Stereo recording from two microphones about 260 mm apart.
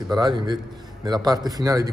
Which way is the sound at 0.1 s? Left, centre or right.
Centre.